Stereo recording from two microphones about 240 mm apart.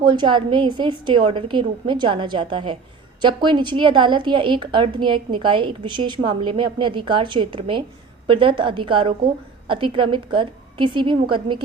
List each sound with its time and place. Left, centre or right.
0.0 s a woman's voice: centre